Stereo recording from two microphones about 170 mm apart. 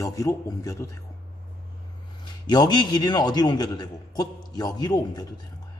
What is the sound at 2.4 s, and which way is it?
A man's voice, 25° left (ahead or behind).